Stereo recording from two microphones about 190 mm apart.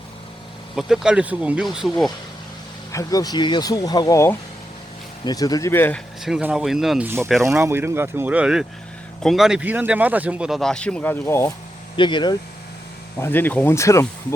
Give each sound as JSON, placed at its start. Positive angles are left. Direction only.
{"t": 0.8, "sound": "speech", "side_deg": -5}
{"t": 2.9, "sound": "speech", "side_deg": 20}
{"t": 6.2, "sound": "speech", "side_deg": -5}
{"t": 7.6, "sound": "speech", "side_deg": -15}
{"t": 11.9, "sound": "speech", "side_deg": 25}
{"t": 13.1, "sound": "speech", "side_deg": 10}